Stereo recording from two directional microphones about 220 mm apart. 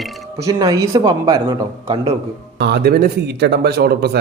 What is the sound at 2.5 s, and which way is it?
Speech, 50° right (ahead or behind).